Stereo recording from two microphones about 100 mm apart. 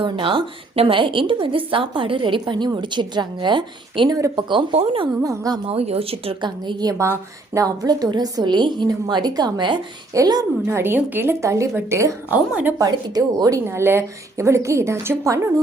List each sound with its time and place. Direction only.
0.0 s a woman's voice: 55° right (ahead or behind)
2.4 s a woman's voice: 45° right (ahead or behind)
4.1 s a woman's voice: 40° right (ahead or behind)
4.4 s a woman's voice: 55° right (ahead or behind)
5.2 s a woman's voice: 35° right (ahead or behind)
5.6 s a woman's voice: 85° right; by 6.9 s 50° right (ahead or behind)
7.0 s a woman's voice: 30° right (ahead or behind)
10.7 s a woman's voice: 25° right (ahead or behind)
12.3 s a woman's voice: 15° right (ahead or behind)
12.8 s a woman's voice: 35° right (ahead or behind)
13.7 s a woman's voice: 25° right (ahead or behind)